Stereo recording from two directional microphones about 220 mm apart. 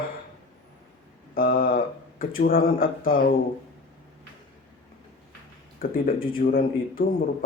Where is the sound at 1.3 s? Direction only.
40° left (ahead or behind).